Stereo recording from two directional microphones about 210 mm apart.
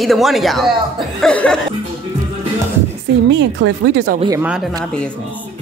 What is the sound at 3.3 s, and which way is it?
Speech, 60° right (ahead or behind).